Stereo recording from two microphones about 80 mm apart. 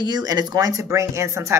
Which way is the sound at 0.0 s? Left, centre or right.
Right.